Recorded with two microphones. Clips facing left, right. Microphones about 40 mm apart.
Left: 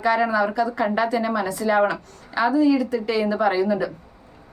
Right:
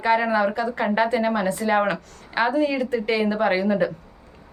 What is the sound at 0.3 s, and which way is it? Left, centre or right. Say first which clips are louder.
A woman's voice: even; right.